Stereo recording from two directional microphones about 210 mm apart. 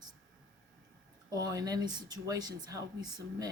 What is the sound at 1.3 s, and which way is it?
Speech, 20° right (ahead or behind).